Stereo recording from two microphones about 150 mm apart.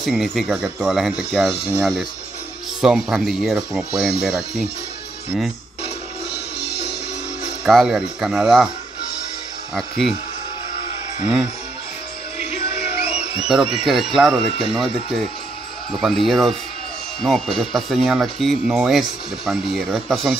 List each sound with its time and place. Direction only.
0.0 s speech: centre (ahead or behind)
2.8 s speech: 5° right (ahead or behind)
7.6 s speech: centre (ahead or behind)
9.8 s speech: centre (ahead or behind)
11.2 s speech: 5° right (ahead or behind)
13.5 s speech: 5° right (ahead or behind)